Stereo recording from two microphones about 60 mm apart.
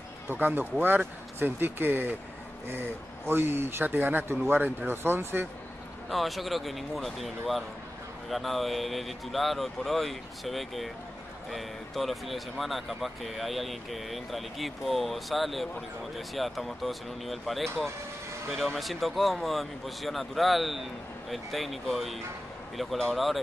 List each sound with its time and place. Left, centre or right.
0.3 s speech: right
3.3 s speech: right
6.0 s speech: centre